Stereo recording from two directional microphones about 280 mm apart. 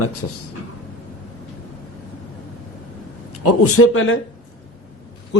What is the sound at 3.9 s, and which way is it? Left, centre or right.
Speech, left.